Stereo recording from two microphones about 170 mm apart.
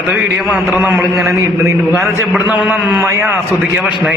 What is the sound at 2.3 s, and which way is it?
A man's voice, 5° right (ahead or behind).